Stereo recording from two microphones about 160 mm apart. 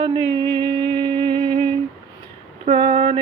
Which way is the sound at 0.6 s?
30° right (ahead or behind).